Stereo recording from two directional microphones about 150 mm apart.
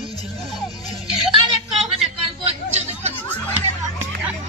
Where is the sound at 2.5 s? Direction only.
45° right (ahead or behind).